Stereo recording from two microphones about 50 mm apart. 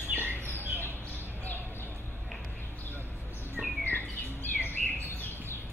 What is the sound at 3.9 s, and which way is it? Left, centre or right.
Bird, left.